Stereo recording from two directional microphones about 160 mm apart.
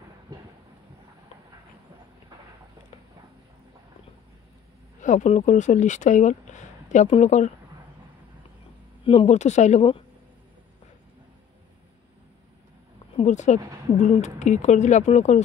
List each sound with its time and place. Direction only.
5.0 s speech: 50° left (ahead or behind)
9.0 s speech: 40° left (ahead or behind)
13.1 s speech: 45° left (ahead or behind)